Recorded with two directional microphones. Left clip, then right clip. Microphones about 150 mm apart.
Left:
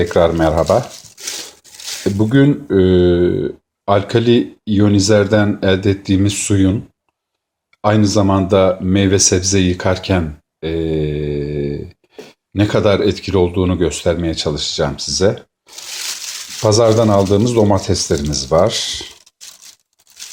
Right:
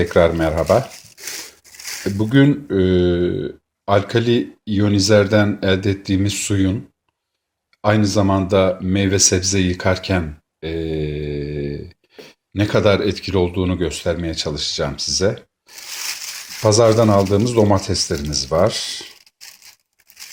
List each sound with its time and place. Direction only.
0.0 s speech: centre (ahead or behind)
2.0 s speech: 5° left (ahead or behind)
7.8 s speech: 5° left (ahead or behind)
16.6 s speech: 5° left (ahead or behind)